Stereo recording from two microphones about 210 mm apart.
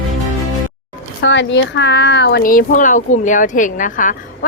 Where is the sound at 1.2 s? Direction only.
60° left (ahead or behind).